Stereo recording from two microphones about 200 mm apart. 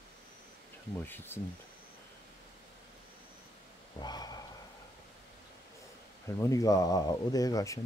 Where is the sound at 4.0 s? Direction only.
20° left (ahead or behind).